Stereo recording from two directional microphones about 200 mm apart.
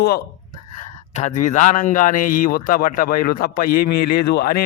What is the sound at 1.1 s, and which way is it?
A man's voice, 35° left (ahead or behind).